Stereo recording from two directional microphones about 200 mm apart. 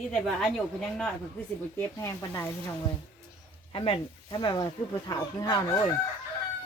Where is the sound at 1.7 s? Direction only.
15° left (ahead or behind).